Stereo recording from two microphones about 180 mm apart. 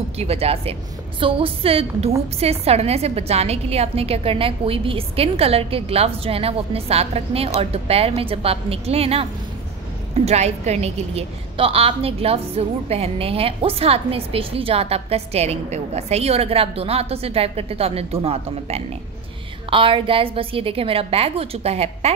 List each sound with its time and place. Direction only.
0.2 s a woman's voice: 35° right (ahead or behind)